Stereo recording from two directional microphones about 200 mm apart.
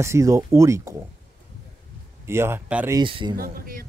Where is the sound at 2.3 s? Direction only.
10° right (ahead or behind).